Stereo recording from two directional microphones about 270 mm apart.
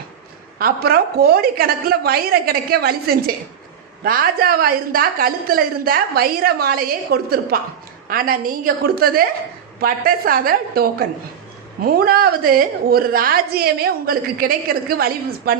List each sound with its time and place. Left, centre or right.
0.6 s a woman's voice: right